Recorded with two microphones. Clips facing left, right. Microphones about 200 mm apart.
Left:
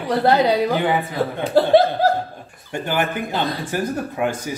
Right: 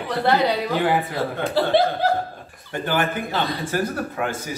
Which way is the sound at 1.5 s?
45° left (ahead or behind).